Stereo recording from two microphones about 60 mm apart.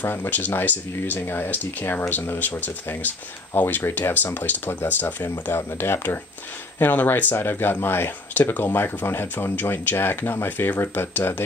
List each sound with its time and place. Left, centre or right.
0.0 s speech: left